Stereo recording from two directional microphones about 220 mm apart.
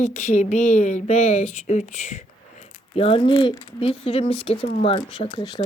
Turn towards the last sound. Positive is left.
turn(degrees=20)  # may be behind; listen again after turning